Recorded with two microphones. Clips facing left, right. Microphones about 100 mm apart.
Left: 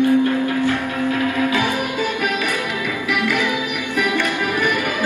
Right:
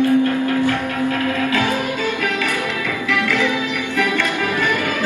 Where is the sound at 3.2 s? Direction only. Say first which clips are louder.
Right 1 dB; 15° left (ahead or behind).